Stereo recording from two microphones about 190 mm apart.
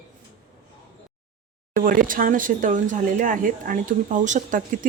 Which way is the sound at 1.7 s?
45° right (ahead or behind).